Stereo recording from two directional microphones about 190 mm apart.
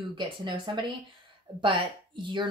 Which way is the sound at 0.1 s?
25° right (ahead or behind).